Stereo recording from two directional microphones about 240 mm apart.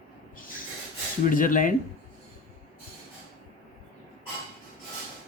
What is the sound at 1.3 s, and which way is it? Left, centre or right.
Speech, left.